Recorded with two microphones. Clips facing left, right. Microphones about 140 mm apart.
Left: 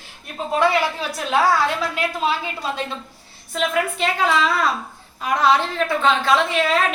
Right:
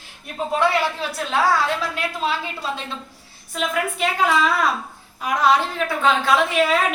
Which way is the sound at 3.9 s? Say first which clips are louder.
Right 3 dB; 10° right (ahead or behind).